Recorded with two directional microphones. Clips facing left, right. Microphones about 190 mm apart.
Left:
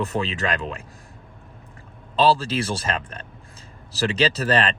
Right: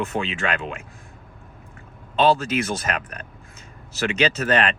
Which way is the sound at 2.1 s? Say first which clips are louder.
Right 1 dB; 30° left (ahead or behind).